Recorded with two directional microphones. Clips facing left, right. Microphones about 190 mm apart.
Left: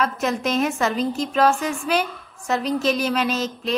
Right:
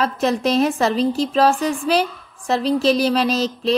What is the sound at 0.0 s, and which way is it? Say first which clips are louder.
A woman's voice: right 4 dB; 35° right (ahead or behind).